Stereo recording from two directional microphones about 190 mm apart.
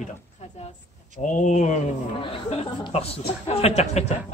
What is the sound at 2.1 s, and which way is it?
Speech, 30° left (ahead or behind).